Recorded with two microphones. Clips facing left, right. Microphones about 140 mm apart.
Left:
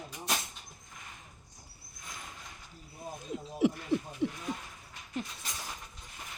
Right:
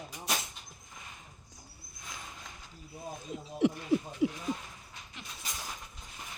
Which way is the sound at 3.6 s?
Centre (ahead or behind).